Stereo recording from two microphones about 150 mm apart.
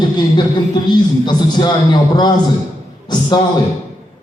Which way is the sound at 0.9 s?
30° left (ahead or behind).